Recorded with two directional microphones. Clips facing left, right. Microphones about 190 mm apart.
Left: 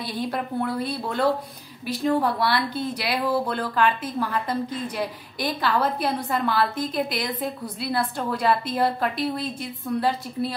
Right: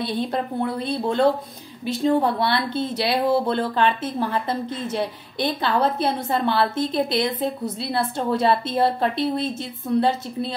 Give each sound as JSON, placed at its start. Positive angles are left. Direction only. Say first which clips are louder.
{"t": 0.0, "sound": "speech", "louder": "right 4 dB", "side_deg": -25}